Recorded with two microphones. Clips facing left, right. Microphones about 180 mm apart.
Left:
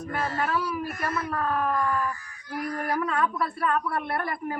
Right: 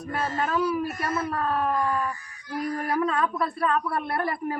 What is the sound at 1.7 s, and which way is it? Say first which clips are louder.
A woman's voice: right 1 dB; 20° right (ahead or behind).